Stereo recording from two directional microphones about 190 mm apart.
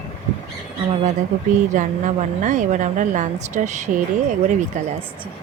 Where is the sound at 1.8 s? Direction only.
40° right (ahead or behind).